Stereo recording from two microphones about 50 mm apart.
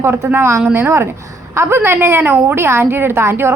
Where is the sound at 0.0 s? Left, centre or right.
Right.